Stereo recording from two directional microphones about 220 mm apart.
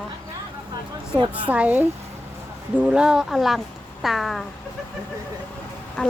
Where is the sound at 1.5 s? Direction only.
5° right (ahead or behind).